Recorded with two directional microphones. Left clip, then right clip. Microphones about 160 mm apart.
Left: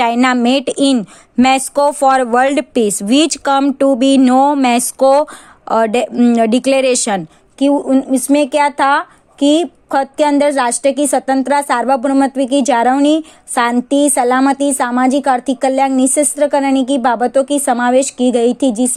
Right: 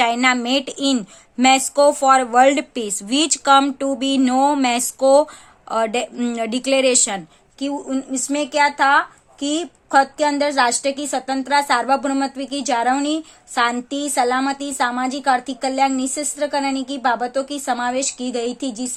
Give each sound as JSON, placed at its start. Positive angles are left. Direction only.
{"t": 0.0, "sound": "speech", "side_deg": 45}